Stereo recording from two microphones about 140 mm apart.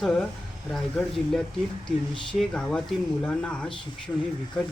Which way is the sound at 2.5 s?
5° left (ahead or behind).